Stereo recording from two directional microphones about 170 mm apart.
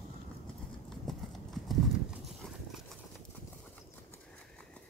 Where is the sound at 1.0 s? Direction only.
Centre (ahead or behind).